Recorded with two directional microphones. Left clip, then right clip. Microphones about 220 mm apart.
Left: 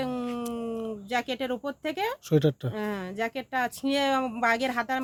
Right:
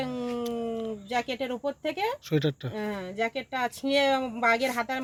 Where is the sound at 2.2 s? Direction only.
50° left (ahead or behind).